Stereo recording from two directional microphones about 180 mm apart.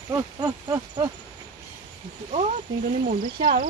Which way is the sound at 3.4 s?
50° right (ahead or behind).